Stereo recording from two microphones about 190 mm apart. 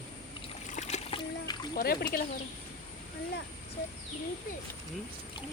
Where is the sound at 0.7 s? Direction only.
35° left (ahead or behind).